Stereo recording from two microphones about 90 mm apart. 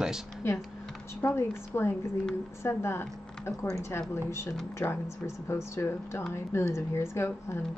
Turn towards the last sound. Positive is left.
turn(degrees=30)  # may be behind; listen again after turning